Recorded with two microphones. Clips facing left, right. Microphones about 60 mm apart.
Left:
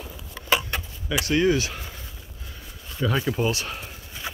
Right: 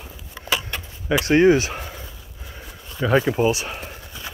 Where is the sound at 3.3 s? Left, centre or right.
Centre.